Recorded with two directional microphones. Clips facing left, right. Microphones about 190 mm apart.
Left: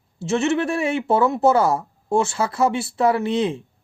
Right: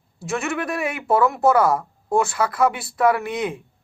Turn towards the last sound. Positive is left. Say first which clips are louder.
# left 2 dB
turn(degrees=30)  # may be behind; listen again after turning